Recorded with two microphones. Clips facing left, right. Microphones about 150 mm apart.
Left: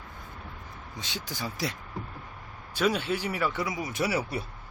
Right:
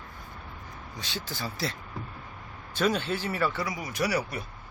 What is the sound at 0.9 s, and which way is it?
Speech, 20° left (ahead or behind).